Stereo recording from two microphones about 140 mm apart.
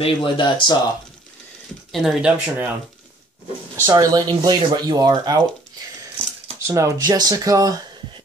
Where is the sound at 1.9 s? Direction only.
Centre (ahead or behind).